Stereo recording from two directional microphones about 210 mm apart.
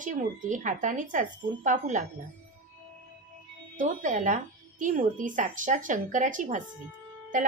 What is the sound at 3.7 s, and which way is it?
A woman's voice, 40° right (ahead or behind).